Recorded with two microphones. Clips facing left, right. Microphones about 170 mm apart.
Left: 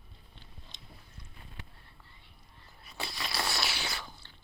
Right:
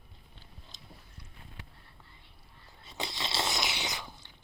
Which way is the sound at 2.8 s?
20° right (ahead or behind).